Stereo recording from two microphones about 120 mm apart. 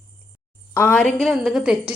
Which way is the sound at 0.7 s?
15° left (ahead or behind).